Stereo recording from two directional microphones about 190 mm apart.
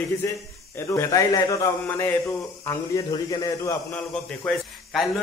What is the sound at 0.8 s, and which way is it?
Speech, 15° left (ahead or behind).